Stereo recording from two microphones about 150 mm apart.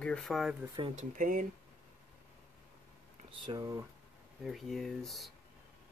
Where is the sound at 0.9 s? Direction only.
60° right (ahead or behind).